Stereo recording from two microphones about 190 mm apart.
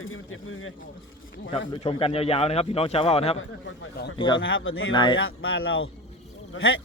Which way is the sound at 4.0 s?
55° left (ahead or behind).